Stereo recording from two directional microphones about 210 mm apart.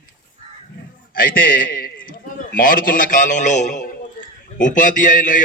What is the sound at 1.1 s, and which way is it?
A man's voice, 40° left (ahead or behind).